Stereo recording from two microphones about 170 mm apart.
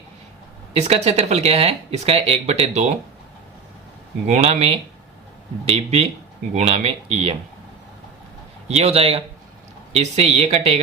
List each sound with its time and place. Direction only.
0.7 s speech: 40° right (ahead or behind)
4.3 s speech: 40° right (ahead or behind)
8.6 s speech: 40° right (ahead or behind)